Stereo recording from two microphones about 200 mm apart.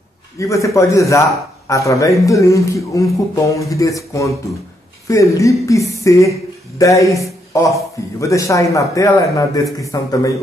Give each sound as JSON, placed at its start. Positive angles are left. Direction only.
{"t": 0.4, "sound": "a man's voice", "side_deg": 15}